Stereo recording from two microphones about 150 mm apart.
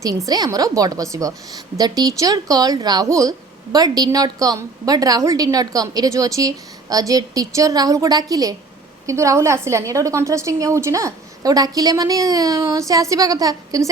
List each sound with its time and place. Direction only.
0.3 s speech: 25° right (ahead or behind)